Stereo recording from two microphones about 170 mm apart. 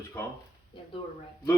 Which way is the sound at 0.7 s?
30° left (ahead or behind).